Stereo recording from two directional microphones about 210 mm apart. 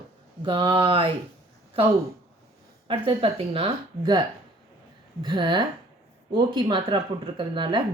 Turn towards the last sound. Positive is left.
turn(degrees=-20)  # may be behind; listen again after turning